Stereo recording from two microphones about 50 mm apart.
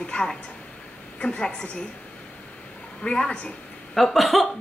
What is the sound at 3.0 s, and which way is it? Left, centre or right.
Speech, centre.